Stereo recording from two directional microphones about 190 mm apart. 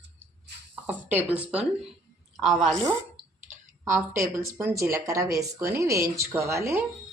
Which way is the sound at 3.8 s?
15° right (ahead or behind).